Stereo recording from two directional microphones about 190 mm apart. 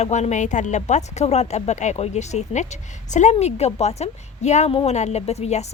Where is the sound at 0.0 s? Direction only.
35° left (ahead or behind).